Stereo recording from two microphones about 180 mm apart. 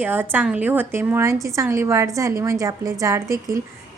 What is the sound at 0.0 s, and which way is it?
A woman's voice, 10° right (ahead or behind).